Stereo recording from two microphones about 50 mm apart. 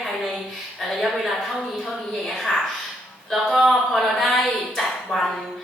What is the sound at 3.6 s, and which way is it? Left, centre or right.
Speech, centre.